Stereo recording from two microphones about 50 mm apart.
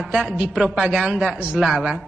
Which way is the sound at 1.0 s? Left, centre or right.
Right.